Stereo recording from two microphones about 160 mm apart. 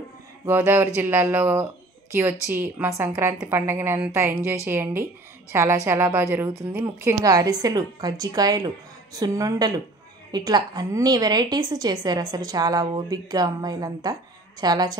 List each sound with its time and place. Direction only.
0.5 s a woman's voice: 15° right (ahead or behind)